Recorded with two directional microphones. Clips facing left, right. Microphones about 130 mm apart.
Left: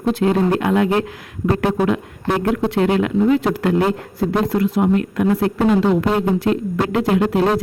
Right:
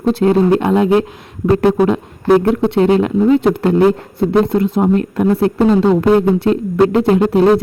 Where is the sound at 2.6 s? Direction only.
30° right (ahead or behind).